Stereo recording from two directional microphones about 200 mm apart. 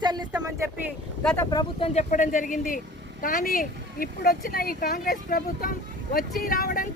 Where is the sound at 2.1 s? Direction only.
40° left (ahead or behind).